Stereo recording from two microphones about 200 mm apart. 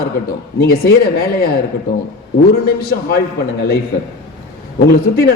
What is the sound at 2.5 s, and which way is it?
Speech, 50° left (ahead or behind).